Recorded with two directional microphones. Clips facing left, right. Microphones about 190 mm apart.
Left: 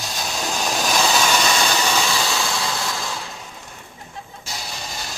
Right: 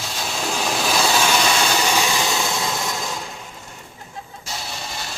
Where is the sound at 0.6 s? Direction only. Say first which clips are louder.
Even; 10° right (ahead or behind).